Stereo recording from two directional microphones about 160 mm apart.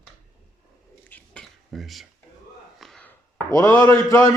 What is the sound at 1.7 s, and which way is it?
Speech, centre (ahead or behind).